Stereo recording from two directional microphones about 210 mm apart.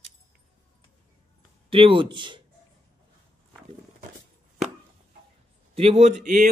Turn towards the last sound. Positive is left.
turn(degrees=-35)  # may be behind; listen again after turning